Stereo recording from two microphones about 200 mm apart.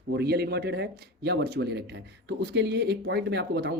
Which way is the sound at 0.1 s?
55° right (ahead or behind).